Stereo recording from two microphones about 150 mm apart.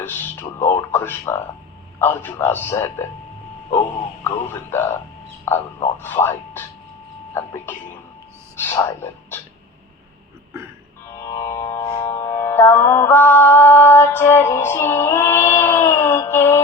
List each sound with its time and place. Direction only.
0.6 s a sound: 15° left (ahead or behind)
2.0 s speech: 15° left (ahead or behind)
4.2 s speech: 15° left (ahead or behind)
11.5 s music: 20° left (ahead or behind)
11.8 s music: 30° left (ahead or behind)
12.0 s carnatic music: 15° left (ahead or behind)